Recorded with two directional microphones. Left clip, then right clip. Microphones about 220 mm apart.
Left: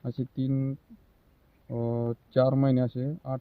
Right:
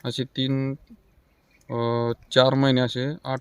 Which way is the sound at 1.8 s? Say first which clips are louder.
Right 7 dB; 10° right (ahead or behind).